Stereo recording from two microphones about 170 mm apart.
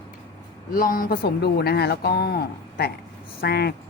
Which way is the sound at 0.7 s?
55° left (ahead or behind).